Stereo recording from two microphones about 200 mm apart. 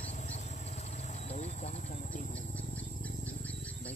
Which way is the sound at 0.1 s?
35° left (ahead or behind).